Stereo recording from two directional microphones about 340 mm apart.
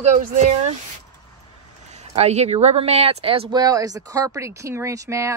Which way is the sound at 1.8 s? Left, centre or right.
Centre.